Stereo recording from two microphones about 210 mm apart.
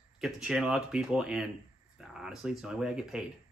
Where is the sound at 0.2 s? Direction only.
Centre (ahead or behind).